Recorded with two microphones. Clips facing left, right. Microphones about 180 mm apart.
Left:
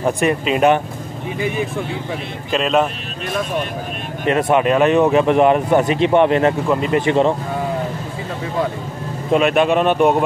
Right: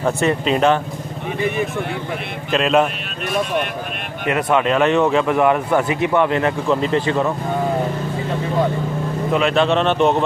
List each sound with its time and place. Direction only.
0.0 s a man's voice: 15° left (ahead or behind)
2.5 s speech: centre (ahead or behind)
4.3 s speech: 25° left (ahead or behind)
9.3 s a man's voice: 20° left (ahead or behind)